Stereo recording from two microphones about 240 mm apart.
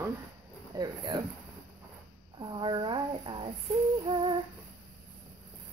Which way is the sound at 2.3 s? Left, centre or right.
Centre.